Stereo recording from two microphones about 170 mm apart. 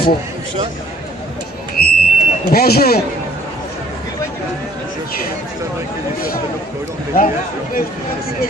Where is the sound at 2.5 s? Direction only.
65° left (ahead or behind).